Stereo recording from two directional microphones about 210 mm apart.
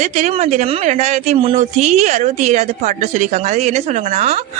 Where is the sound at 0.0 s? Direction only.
35° right (ahead or behind).